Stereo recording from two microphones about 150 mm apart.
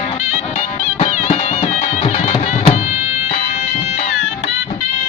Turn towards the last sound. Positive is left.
turn(degrees=50)  # may be behind; listen again after turning